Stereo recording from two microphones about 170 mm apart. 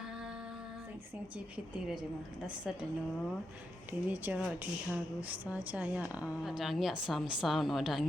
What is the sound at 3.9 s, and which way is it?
Speech, 10° right (ahead or behind).